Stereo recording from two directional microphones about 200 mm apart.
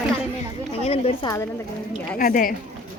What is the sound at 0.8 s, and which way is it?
Speech, 30° left (ahead or behind).